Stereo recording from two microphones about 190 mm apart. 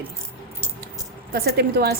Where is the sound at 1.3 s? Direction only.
55° right (ahead or behind).